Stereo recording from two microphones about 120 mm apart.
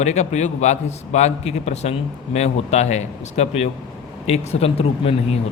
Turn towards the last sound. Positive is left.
turn(degrees=55)  # may be behind; listen again after turning